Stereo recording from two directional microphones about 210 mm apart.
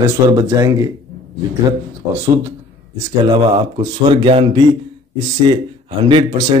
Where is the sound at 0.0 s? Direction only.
15° right (ahead or behind).